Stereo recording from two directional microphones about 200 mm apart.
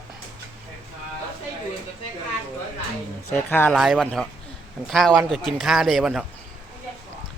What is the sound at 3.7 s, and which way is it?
Speech, centre (ahead or behind).